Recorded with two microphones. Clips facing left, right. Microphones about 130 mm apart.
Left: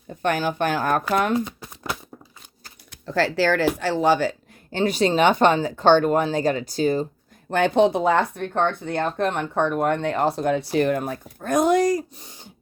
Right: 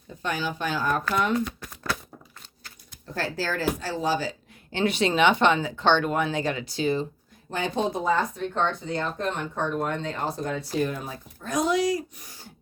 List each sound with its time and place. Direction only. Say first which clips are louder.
0.2 s speech: left 7 dB; 55° left (ahead or behind)
1.5 s a sound: even; 25° left (ahead or behind)
2.9 s speech: left 8 dB; 90° left; by 4.4 s 65° left (ahead or behind)
4.7 s speech: left 4 dB; 40° left (ahead or behind)
7.5 s speech: left 9 dB; 65° left (ahead or behind); by 12.0 s 50° left (ahead or behind)
12.1 s speech: left 3 dB; 25° left (ahead or behind)